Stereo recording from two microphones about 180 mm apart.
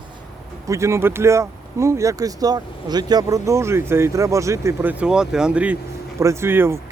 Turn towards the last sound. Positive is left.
turn(degrees=-15)  # may be behind; listen again after turning